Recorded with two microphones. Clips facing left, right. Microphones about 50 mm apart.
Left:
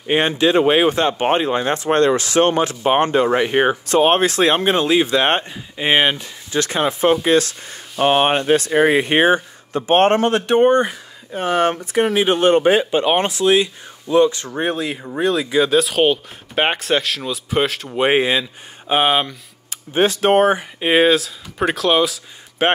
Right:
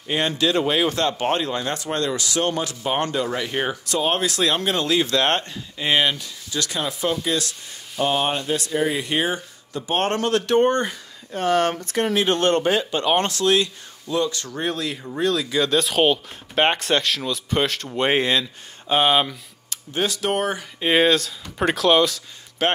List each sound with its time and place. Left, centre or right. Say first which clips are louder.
0.0 s speech: left 5 dB; left
1.9 s speech: left 12 dB; left; by 15.8 s centre
15.8 s speech: left 3 dB; centre
19.9 s speech: left 8 dB; left
20.8 s speech: left 3 dB; centre
22.6 s speech: left 5 dB; centre